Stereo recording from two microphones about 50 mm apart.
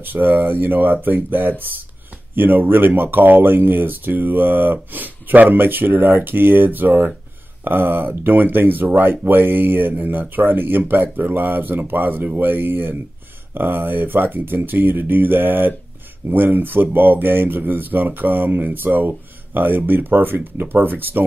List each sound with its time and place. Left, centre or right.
0.0 s speech: right